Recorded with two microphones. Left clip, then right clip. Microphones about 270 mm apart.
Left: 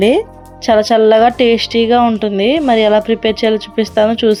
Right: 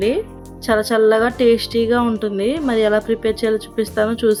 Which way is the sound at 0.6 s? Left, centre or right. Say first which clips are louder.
Left 6 dB; centre.